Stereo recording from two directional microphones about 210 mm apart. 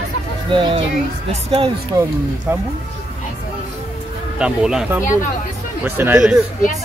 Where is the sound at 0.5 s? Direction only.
25° right (ahead or behind).